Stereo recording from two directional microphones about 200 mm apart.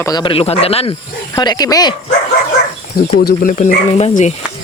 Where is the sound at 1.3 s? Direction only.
20° left (ahead or behind).